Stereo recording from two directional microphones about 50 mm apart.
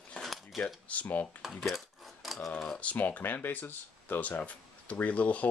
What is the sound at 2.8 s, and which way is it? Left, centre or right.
Speech, left.